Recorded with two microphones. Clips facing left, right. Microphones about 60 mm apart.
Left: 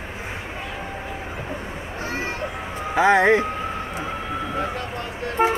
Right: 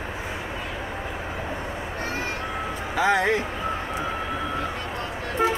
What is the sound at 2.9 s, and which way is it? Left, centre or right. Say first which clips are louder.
Speech: left 5 dB; left.